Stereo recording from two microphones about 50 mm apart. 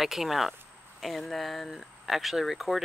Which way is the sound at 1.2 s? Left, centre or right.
Centre.